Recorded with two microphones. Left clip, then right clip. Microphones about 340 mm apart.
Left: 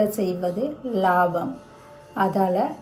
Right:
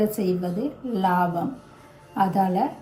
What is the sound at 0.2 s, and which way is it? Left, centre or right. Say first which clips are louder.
A woman's voice: left 2 dB; centre.